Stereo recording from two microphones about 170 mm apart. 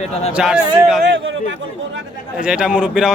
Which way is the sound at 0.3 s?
5° right (ahead or behind).